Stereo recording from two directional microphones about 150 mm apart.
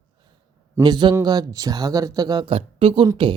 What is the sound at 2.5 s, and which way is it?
Speech, 40° right (ahead or behind).